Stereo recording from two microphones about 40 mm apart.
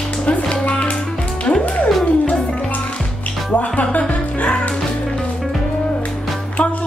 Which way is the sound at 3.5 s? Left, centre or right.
Left.